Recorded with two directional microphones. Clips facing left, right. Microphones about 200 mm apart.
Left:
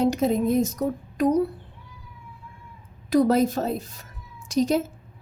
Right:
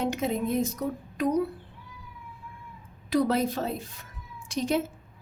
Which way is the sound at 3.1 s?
45° left (ahead or behind).